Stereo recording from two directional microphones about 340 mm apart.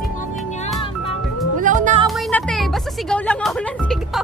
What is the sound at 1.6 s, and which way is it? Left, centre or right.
Music, right.